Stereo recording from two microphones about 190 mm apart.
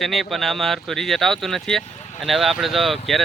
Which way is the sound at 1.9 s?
35° left (ahead or behind).